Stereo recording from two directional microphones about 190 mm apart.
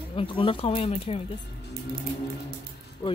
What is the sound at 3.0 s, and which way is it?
Music, 20° left (ahead or behind).